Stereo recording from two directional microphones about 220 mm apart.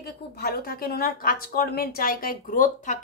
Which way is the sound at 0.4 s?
45° left (ahead or behind).